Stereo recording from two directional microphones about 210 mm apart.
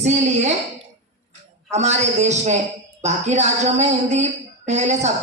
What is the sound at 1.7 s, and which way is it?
Speech, 30° right (ahead or behind).